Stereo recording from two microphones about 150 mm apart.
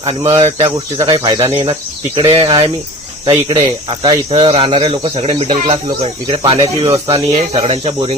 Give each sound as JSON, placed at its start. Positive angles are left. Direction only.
{"t": 0.0, "sound": "speech", "side_deg": -40}